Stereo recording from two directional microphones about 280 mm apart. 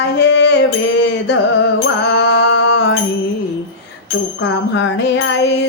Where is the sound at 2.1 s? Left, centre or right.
Left.